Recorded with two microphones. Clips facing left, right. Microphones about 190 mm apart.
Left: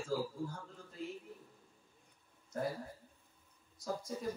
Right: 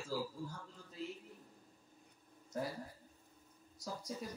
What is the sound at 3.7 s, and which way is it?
Speech, 50° left (ahead or behind).